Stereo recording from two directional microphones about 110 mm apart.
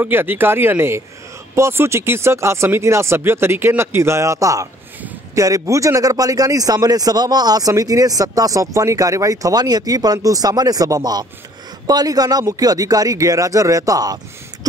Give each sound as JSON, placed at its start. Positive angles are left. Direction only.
{"t": 0.0, "sound": "a man's voice", "side_deg": -20}